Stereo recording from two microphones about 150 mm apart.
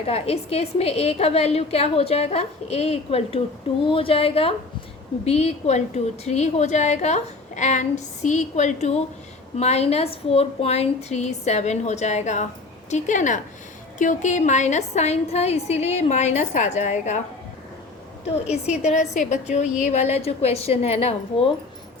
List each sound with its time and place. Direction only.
0.0 s a woman's voice: 40° left (ahead or behind)
18.4 s a woman's voice: 45° left (ahead or behind)